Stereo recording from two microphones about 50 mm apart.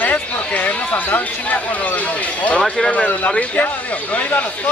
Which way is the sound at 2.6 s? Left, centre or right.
Centre.